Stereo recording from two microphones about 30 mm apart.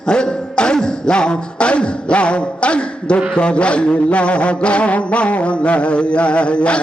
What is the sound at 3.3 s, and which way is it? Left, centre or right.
Mantra, left.